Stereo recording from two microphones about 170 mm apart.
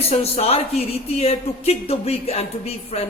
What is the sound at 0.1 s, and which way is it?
A man's voice, 35° left (ahead or behind).